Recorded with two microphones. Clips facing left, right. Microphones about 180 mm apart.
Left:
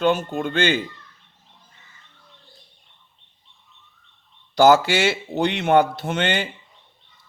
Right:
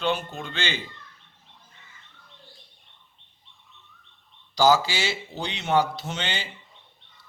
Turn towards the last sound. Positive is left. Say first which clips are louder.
# left 9 dB
turn(degrees=55)  # may be behind; listen again after turning